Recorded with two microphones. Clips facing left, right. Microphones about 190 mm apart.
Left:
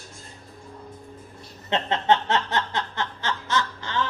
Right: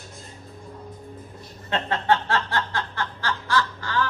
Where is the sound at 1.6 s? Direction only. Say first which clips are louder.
Left 1 dB; 20° left (ahead or behind).